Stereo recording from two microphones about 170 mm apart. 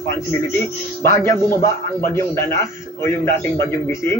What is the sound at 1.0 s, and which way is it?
A man's voice, 15° left (ahead or behind).